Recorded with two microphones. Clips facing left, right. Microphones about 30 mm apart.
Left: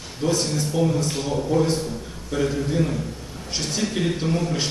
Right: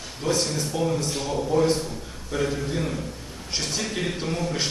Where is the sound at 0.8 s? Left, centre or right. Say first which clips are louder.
Left 3 dB; centre.